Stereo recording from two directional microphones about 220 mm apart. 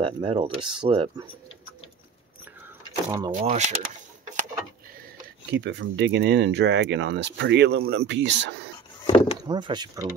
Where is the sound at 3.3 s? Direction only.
35° right (ahead or behind).